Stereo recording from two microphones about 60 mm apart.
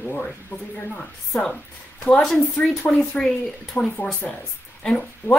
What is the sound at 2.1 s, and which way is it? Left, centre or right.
Speech, centre.